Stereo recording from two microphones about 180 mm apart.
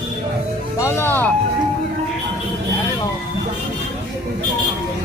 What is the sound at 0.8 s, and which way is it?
Music, 15° left (ahead or behind).